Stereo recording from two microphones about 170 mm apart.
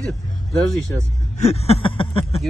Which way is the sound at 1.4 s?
35° left (ahead or behind).